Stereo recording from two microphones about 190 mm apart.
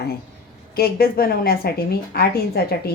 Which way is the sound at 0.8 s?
50° left (ahead or behind).